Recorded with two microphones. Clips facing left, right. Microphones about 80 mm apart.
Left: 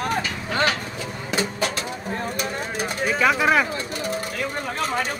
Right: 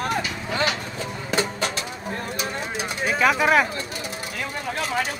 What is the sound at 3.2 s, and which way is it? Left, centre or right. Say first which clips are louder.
Speech: right 1 dB; centre.